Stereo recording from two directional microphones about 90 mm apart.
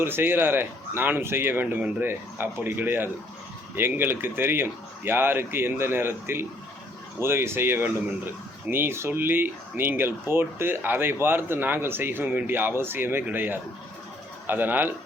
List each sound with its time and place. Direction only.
0.0 s speech: 25° right (ahead or behind)